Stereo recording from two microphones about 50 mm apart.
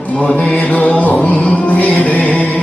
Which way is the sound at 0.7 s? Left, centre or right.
Left.